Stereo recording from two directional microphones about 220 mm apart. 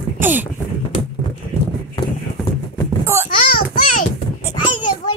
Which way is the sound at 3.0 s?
10° right (ahead or behind).